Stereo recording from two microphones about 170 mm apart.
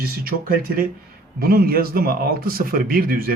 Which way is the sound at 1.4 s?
65° right (ahead or behind).